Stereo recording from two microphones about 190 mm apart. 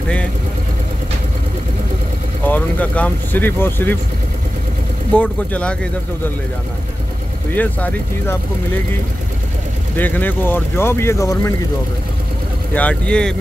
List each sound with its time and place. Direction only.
2.4 s speech: 10° left (ahead or behind)
5.1 s speech: 5° left (ahead or behind)
7.5 s speech: 10° left (ahead or behind)
9.9 s speech: 10° left (ahead or behind)
12.7 s speech: 5° left (ahead or behind)